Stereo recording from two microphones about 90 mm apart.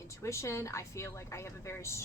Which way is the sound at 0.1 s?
35° left (ahead or behind).